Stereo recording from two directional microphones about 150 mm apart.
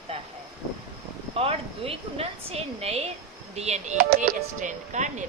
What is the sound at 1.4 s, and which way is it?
A woman's voice, 40° right (ahead or behind).